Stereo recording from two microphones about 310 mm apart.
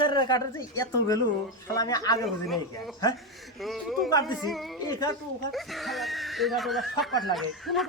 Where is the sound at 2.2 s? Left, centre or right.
Centre.